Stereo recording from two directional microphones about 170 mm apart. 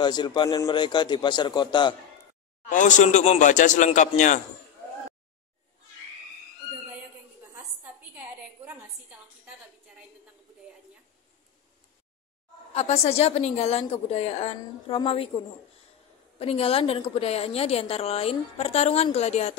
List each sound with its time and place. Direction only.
0.0 s a man's voice: 25° left (ahead or behind)
2.7 s speech: 45° left (ahead or behind)
7.5 s a sound: 10° right (ahead or behind)
12.7 s a woman's voice: 40° left (ahead or behind)
16.3 s a woman's voice: 35° left (ahead or behind)